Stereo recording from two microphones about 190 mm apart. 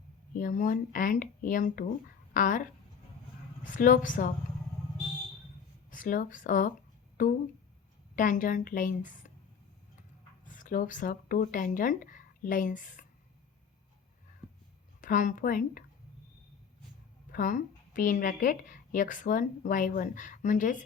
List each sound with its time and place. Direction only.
0.3 s a woman's voice: 45° left (ahead or behind)
5.9 s a woman's voice: 45° left (ahead or behind)
10.4 s speech: 45° left (ahead or behind)
15.0 s a woman's voice: 45° left (ahead or behind)
17.3 s a woman's voice: 45° left (ahead or behind)